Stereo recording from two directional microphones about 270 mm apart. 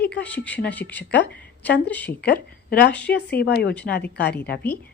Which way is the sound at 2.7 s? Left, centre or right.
Left.